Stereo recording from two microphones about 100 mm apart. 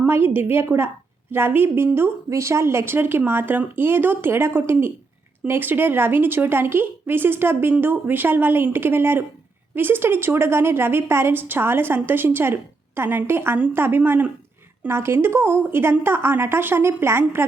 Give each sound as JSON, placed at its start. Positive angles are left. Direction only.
{"t": 0.1, "sound": "speech", "side_deg": -20}